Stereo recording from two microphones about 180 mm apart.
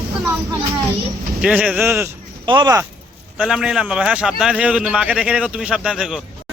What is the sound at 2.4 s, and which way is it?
Speech, 25° right (ahead or behind).